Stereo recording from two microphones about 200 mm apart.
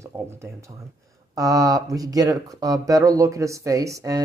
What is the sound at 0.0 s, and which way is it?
Speech, 15° right (ahead or behind).